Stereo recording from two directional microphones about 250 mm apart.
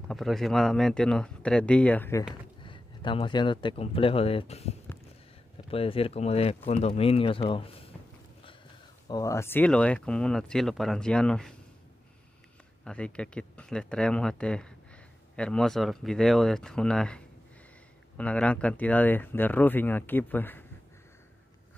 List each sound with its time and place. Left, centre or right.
0.1 s speech: centre
2.6 s speech: centre
9.1 s speech: centre
12.8 s speech: centre